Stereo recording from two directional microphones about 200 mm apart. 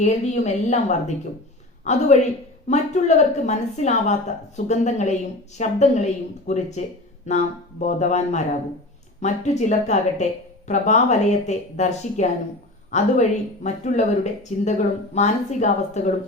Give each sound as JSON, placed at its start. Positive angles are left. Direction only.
{"t": 0.0, "sound": "speech", "side_deg": 35}